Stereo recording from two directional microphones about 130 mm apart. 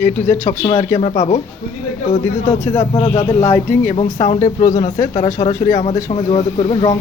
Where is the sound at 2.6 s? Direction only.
20° left (ahead or behind).